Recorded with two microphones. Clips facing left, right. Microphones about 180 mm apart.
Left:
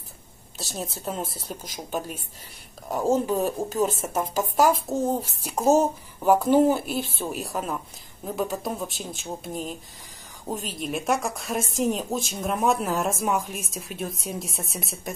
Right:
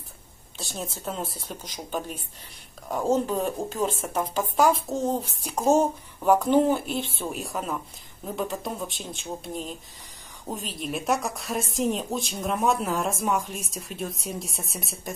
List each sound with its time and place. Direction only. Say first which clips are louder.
0.6 s a woman's voice: left 1 dB; centre (ahead or behind)